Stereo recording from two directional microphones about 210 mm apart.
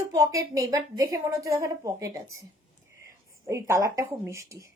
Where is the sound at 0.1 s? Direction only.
15° right (ahead or behind).